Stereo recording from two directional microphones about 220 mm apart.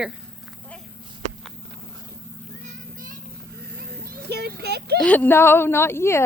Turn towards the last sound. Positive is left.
turn(degrees=10)  # may be behind; listen again after turning